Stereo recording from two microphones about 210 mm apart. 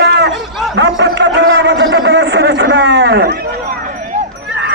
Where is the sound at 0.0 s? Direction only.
55° right (ahead or behind).